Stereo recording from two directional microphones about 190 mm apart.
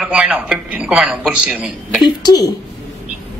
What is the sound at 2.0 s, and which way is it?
Speech, 20° left (ahead or behind).